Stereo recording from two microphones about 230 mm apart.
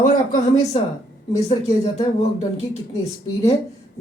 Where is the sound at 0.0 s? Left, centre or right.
Left.